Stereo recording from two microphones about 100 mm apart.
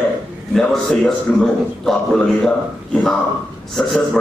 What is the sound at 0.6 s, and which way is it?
A man's voice, 5° left (ahead or behind).